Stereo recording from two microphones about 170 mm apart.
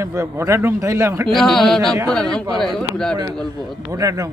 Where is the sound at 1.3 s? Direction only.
Centre (ahead or behind).